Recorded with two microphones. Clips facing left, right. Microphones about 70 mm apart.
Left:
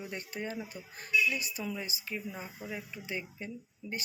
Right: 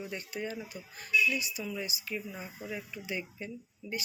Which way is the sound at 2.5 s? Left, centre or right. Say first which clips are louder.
Right 4 dB; centre.